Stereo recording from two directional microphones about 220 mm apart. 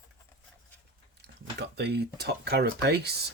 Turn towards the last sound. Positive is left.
turn(degrees=-45)  # may be behind; listen again after turning